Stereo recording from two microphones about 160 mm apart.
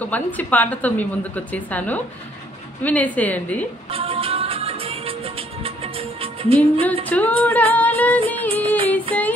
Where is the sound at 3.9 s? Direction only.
35° right (ahead or behind).